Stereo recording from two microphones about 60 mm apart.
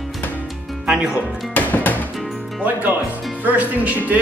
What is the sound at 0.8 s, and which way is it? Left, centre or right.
Speech, centre.